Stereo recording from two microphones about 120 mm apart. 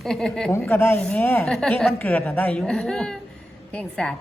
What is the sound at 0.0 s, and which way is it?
Speech, 5° left (ahead or behind).